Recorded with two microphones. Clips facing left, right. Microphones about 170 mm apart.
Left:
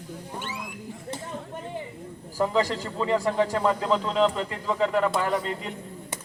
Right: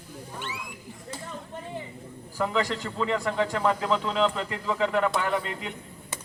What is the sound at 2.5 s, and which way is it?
Speech, 35° left (ahead or behind).